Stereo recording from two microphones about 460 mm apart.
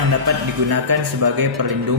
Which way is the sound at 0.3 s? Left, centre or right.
Right.